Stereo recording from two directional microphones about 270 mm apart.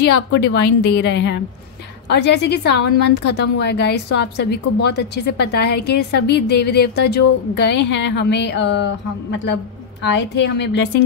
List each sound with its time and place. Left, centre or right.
0.3 s a woman's voice: left